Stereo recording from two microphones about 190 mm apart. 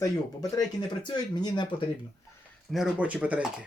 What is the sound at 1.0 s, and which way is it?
Speech, 20° left (ahead or behind).